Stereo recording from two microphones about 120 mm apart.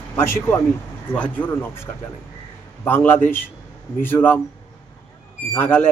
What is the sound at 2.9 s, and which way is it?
A man's voice, 15° left (ahead or behind).